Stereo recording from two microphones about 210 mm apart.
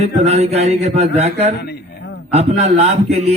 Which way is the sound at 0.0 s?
30° right (ahead or behind).